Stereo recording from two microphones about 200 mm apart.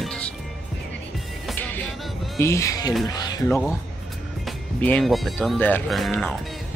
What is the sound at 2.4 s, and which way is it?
Speech, 15° left (ahead or behind).